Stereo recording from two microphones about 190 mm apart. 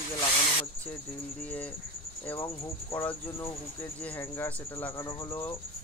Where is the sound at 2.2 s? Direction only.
10° left (ahead or behind).